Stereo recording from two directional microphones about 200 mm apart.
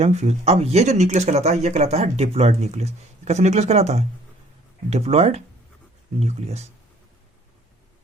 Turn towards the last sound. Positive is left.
turn(degrees=-30)  # may be behind; listen again after turning